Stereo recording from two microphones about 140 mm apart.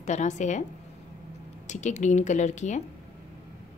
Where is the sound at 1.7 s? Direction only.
60° left (ahead or behind).